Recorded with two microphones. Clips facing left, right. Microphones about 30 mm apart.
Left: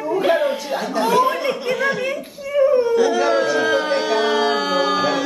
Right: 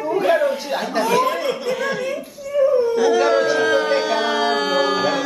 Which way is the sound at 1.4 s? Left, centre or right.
Centre.